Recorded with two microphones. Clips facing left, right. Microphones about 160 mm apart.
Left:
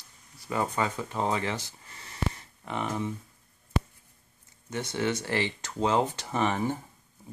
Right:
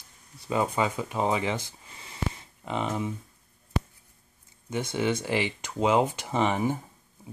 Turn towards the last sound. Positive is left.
turn(degrees=-15)  # may be behind; listen again after turning